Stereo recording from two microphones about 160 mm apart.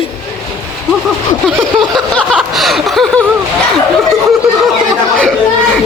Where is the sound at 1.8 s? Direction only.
5° left (ahead or behind).